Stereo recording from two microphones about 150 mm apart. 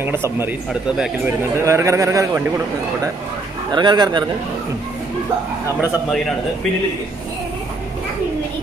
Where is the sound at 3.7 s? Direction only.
30° right (ahead or behind).